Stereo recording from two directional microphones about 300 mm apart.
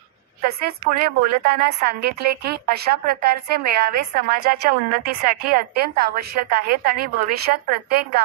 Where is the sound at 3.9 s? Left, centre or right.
Right.